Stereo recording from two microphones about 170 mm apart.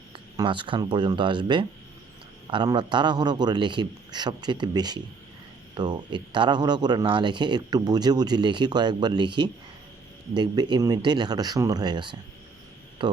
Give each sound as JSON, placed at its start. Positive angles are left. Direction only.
{"t": 0.3, "sound": "speech", "side_deg": -30}